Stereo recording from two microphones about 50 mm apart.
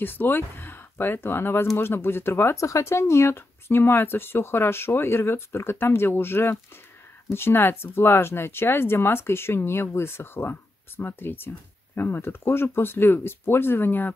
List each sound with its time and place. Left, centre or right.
0.0 s speech: left
2.5 s speech: left